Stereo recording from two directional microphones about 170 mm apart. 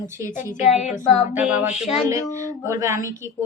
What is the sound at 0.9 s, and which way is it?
Child singing, 45° left (ahead or behind).